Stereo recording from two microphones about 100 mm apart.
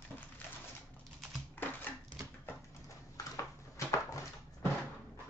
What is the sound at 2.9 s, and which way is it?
Dog, 35° left (ahead or behind).